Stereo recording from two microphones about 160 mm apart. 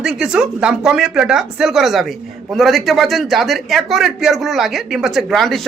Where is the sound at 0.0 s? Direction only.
5° right (ahead or behind).